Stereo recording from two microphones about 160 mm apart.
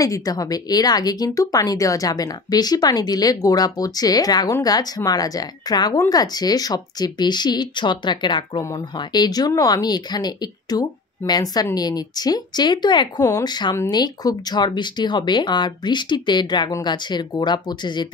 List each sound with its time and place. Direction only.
0.0 s speech: 20° left (ahead or behind)